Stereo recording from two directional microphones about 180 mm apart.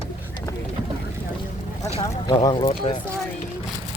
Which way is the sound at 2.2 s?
25° left (ahead or behind).